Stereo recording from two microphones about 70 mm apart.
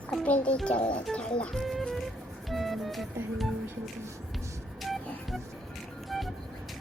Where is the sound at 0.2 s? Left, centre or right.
Centre.